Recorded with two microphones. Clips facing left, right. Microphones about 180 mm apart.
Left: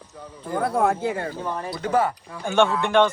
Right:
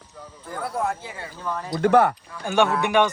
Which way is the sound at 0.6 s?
60° left (ahead or behind).